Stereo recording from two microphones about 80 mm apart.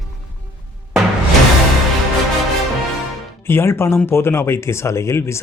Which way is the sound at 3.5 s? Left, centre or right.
Left.